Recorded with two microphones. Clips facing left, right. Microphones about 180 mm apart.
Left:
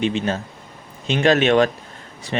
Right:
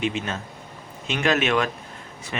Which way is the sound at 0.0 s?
30° left (ahead or behind).